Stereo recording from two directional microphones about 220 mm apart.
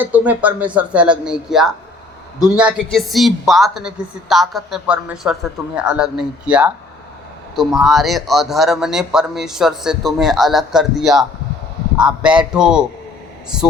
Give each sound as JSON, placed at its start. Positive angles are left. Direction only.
{"t": 0.0, "sound": "speech", "side_deg": -5}